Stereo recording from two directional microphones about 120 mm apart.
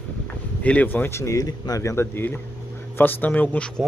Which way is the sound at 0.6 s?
15° left (ahead or behind).